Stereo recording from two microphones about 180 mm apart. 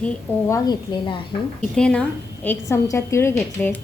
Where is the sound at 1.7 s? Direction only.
5° left (ahead or behind).